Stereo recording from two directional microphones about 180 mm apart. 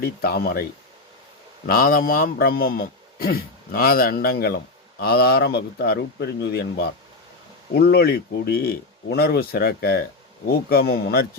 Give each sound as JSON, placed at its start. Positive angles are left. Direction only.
{"t": 0.0, "sound": "a man's voice", "side_deg": 60}
{"t": 1.6, "sound": "a man's voice", "side_deg": 55}